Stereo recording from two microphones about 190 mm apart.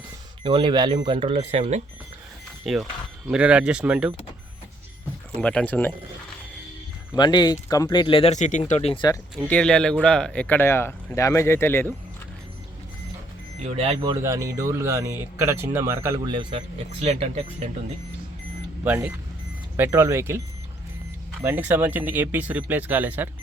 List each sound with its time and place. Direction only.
0.4 s speech: 25° right (ahead or behind)
2.7 s speech: centre (ahead or behind)
5.4 s speech: 5° left (ahead or behind)
7.2 s speech: 20° left (ahead or behind)
9.5 s speech: 5° left (ahead or behind)
13.7 s speech: 30° right (ahead or behind)
14.1 s speech: 15° right (ahead or behind); by 17.7 s 35° right (ahead or behind)
18.9 s speech: 10° right (ahead or behind)
21.4 s speech: 10° right (ahead or behind)